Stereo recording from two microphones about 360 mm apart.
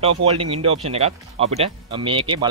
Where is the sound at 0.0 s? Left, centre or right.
Centre.